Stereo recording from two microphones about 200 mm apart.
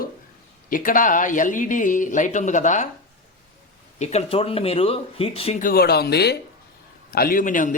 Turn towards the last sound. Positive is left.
turn(degrees=40)  # may be behind; listen again after turning